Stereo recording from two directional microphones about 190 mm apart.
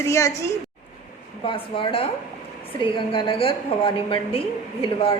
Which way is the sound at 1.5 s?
25° left (ahead or behind).